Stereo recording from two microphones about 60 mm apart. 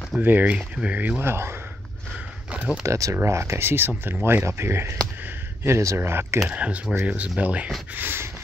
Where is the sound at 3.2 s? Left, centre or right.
Right.